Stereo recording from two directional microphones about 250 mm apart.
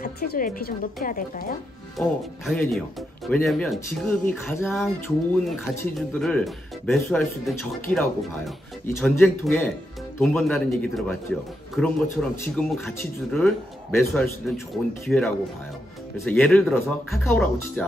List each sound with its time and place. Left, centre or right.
0.0 s speech: left
2.0 s speech: centre
16.3 s speech: centre